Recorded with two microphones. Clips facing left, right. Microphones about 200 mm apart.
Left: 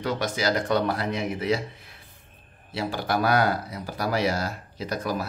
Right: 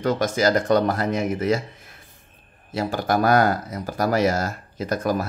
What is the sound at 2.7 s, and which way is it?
Speech, 45° right (ahead or behind).